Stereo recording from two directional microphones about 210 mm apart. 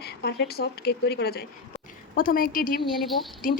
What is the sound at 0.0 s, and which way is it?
A woman's voice, 50° left (ahead or behind).